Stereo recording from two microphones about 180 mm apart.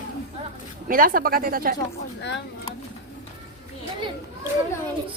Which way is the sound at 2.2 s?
75° left (ahead or behind).